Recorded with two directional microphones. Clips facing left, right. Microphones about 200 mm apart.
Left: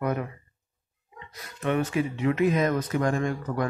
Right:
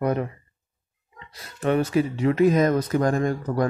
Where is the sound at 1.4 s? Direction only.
30° right (ahead or behind).